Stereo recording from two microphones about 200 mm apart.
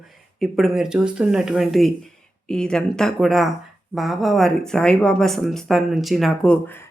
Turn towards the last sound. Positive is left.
turn(degrees=5)  # may be behind; listen again after turning